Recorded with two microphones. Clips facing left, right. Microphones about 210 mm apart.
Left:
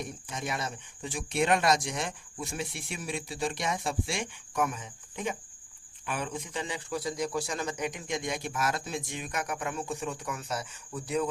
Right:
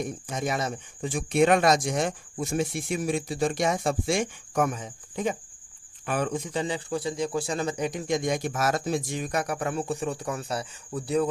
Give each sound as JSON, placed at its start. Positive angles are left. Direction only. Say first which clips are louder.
{"t": 0.0, "sound": "a man's voice", "louder": "right 7 dB", "side_deg": -40}